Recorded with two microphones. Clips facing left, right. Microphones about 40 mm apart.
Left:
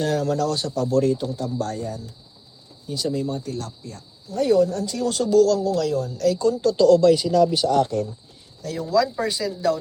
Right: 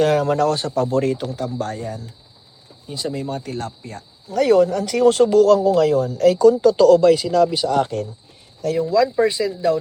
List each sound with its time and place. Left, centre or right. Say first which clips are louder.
0.0 s speech: right 6 dB; right
1.2 s speech: right 2 dB; right
1.5 s speech: right 1 dB; right
2.8 s speech: left 1 dB; right
3.3 s speech: right 3 dB; right
4.4 s speech: right 4 dB; right